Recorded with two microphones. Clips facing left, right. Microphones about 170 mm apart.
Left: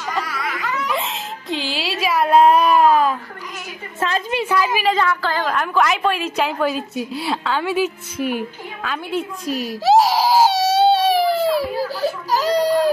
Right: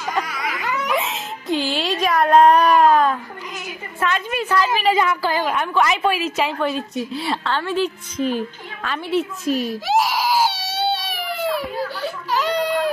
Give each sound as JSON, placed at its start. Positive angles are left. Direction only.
{"t": 0.8, "sound": "baby cry", "side_deg": 0}
{"t": 4.0, "sound": "a woman's voice", "side_deg": 25}
{"t": 4.5, "sound": "a woman's voice", "side_deg": 10}
{"t": 4.8, "sound": "a woman's voice", "side_deg": -15}
{"t": 5.6, "sound": "a woman's voice", "side_deg": 0}
{"t": 9.5, "sound": "a child's voice", "side_deg": -40}
{"t": 9.8, "sound": "baby cry", "side_deg": 35}